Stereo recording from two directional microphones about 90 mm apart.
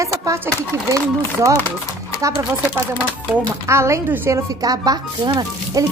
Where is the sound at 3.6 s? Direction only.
30° right (ahead or behind).